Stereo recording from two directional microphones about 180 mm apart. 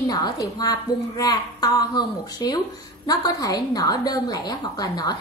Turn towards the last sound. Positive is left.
turn(degrees=20)  # may be behind; listen again after turning